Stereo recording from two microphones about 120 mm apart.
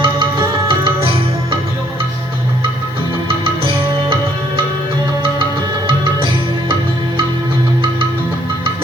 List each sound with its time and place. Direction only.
0.0 s music: 45° right (ahead or behind)
3.2 s music: 50° right (ahead or behind)